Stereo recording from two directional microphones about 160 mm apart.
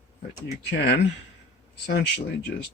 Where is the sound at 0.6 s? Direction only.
90° left.